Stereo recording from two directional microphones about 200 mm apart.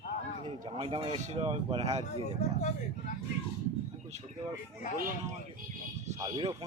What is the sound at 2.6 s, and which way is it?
Speech, 40° left (ahead or behind).